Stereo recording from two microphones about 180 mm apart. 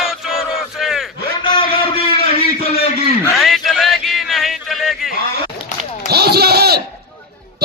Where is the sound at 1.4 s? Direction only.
25° left (ahead or behind).